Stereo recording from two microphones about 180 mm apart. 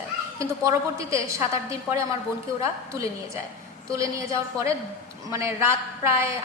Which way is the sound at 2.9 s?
15° right (ahead or behind).